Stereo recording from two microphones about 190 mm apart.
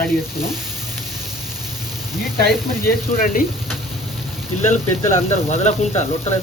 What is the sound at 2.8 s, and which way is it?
Speech, 45° left (ahead or behind).